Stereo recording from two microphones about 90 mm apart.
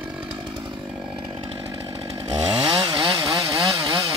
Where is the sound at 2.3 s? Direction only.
55° right (ahead or behind).